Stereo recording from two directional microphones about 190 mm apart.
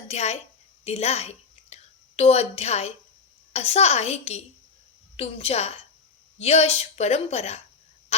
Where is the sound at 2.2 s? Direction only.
35° left (ahead or behind).